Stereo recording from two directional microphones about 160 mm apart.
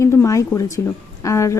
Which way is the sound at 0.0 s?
15° left (ahead or behind).